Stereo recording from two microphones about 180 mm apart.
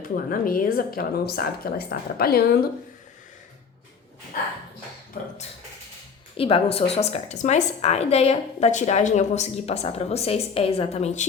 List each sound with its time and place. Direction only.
0.3 s a woman's voice: 50° left (ahead or behind)
5.2 s speech: 45° left (ahead or behind)
6.3 s a woman's voice: 30° left (ahead or behind)